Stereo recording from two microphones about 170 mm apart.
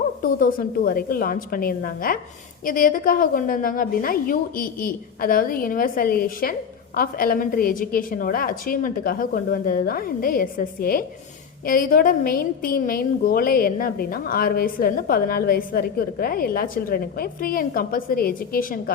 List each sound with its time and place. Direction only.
0.2 s a woman's voice: 55° left (ahead or behind)